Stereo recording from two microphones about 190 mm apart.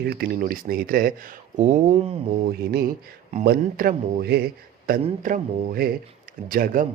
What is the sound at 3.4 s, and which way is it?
A man's voice, 50° right (ahead or behind).